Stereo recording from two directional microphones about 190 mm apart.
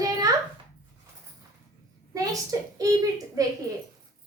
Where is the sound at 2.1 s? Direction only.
20° right (ahead or behind).